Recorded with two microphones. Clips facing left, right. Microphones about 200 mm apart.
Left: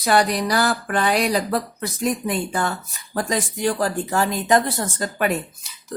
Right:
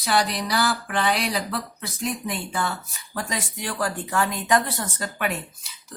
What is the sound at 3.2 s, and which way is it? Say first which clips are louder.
Speech: left 7 dB; 40° left (ahead or behind).